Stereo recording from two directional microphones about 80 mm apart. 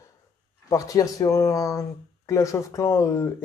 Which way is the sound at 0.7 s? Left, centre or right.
Left.